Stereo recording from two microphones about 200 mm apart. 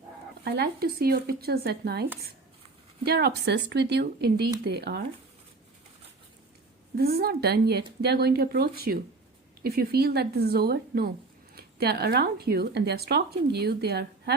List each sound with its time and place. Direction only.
0.4 s speech: 50° right (ahead or behind)
6.9 s speech: 50° right (ahead or behind)